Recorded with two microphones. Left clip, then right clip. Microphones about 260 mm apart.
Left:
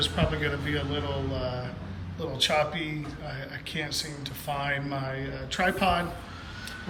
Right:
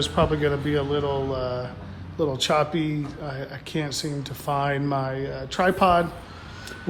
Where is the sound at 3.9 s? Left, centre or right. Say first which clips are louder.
Right 3 dB; right.